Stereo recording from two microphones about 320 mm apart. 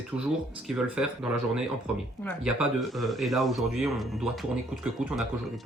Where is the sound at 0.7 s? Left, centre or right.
Centre.